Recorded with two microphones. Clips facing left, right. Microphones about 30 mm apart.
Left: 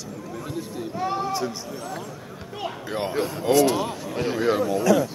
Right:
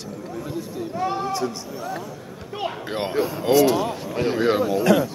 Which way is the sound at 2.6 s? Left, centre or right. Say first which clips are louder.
Right 2 dB; right.